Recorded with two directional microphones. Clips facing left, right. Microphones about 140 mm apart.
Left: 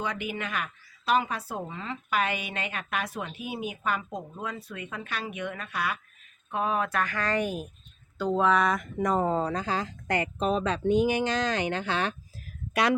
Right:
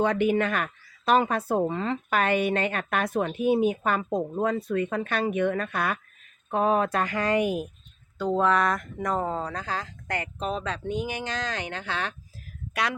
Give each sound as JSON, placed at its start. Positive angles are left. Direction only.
{"t": 0.0, "sound": "speech", "side_deg": -50}
{"t": 6.5, "sound": "speech", "side_deg": -40}
{"t": 7.3, "sound": "speech", "side_deg": -10}
{"t": 8.2, "sound": "speech", "side_deg": 0}